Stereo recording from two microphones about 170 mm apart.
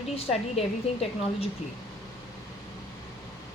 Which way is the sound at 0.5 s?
35° left (ahead or behind).